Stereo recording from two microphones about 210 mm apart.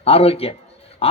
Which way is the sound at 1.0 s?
30° left (ahead or behind).